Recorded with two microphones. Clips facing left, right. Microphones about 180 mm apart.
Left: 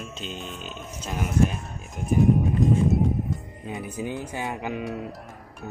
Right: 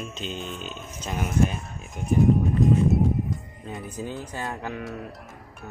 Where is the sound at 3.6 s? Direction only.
10° left (ahead or behind).